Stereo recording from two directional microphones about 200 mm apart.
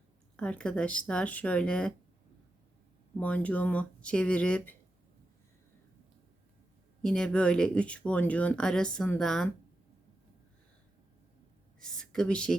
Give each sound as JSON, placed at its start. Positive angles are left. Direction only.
{"t": 0.3, "sound": "speech", "side_deg": 5}
{"t": 3.2, "sound": "speech", "side_deg": 5}
{"t": 7.0, "sound": "speech", "side_deg": 5}
{"t": 11.8, "sound": "speech", "side_deg": 5}